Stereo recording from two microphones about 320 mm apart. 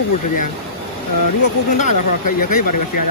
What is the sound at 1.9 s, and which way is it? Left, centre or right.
Speech, left.